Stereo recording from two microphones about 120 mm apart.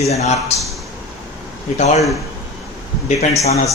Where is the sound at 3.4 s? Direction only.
60° left (ahead or behind).